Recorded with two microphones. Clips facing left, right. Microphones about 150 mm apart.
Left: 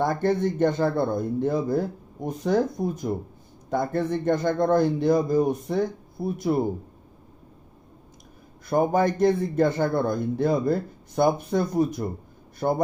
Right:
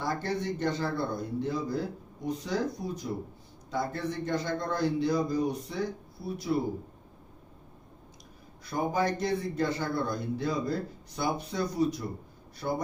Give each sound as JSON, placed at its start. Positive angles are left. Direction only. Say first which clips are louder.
{"t": 0.0, "sound": "a man's voice", "louder": "left 9 dB", "side_deg": 50}
{"t": 8.6, "sound": "a man's voice", "louder": "left 7 dB", "side_deg": 50}